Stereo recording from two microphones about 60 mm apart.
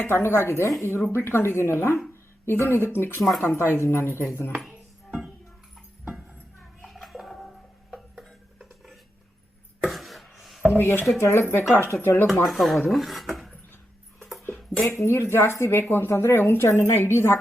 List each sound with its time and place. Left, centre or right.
0.1 s a woman's voice: left
3.2 s speech: centre
3.4 s speech: left
6.8 s music: centre
8.1 s a sound: centre
10.7 s a woman's voice: left
12.5 s speech: centre
14.8 s a woman's voice: left